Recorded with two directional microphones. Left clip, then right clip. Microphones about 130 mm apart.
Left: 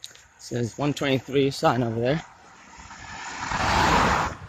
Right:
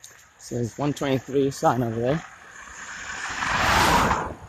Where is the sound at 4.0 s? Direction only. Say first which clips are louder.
Left 1 dB; 50° left (ahead or behind).